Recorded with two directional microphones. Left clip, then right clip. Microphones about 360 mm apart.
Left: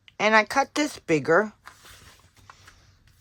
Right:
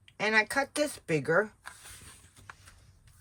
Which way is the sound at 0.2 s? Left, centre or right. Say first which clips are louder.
Left 7 dB; centre.